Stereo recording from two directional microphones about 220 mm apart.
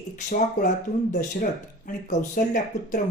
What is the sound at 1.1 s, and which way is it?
Speech, 35° left (ahead or behind).